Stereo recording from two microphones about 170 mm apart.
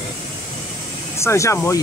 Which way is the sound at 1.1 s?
15° left (ahead or behind).